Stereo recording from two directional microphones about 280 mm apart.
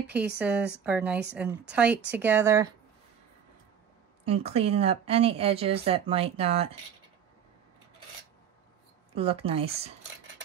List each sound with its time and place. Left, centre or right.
0.4 s speech: centre
4.3 s speech: right
9.1 s speech: centre